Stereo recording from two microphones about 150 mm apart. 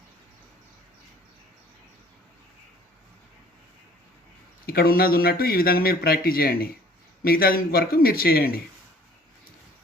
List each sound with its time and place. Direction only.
4.6 s speech: 85° left